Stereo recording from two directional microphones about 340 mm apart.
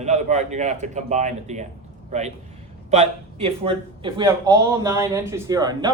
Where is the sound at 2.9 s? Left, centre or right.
Centre.